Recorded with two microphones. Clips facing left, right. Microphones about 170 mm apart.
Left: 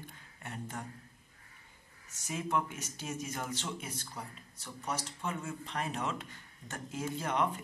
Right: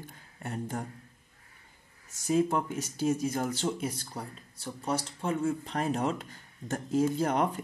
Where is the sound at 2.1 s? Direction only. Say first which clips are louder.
Right 8 dB; 35° right (ahead or behind).